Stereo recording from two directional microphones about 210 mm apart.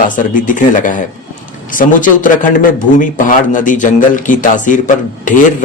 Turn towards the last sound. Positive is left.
turn(degrees=40)  # may be behind; listen again after turning